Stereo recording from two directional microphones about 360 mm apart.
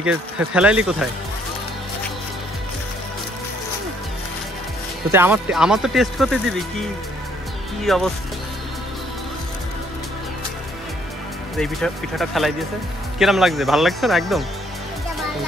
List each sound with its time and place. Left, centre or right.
0.0 s speech: centre
5.1 s speech: centre
11.5 s speech: centre